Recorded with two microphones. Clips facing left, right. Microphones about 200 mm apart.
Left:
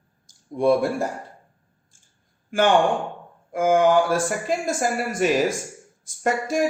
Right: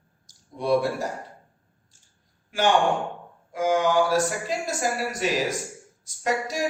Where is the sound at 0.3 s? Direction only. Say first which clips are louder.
Left 4 dB; 50° left (ahead or behind).